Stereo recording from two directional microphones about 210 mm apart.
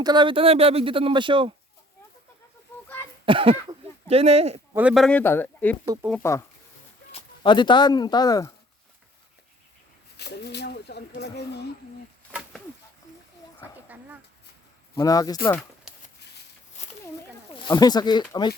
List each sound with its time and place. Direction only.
0.0 s speech: 20° right (ahead or behind)
3.2 s speech: 25° right (ahead or behind)
4.7 s speech: 5° right (ahead or behind)
5.8 s speech: 15° right (ahead or behind)
6.1 s speech: 10° left (ahead or behind)
7.1 s speech: 20° left (ahead or behind)
10.2 s speech: 50° left (ahead or behind)
13.8 s a sound: 10° right (ahead or behind)
14.9 s speech: 15° left (ahead or behind)
16.7 s a sound: 35° left (ahead or behind)
17.7 s speech: 20° left (ahead or behind)